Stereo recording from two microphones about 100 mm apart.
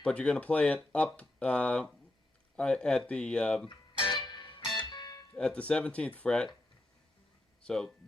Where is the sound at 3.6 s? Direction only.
55° left (ahead or behind).